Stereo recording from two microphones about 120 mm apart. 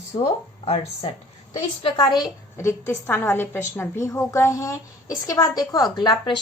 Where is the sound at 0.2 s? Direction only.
50° left (ahead or behind).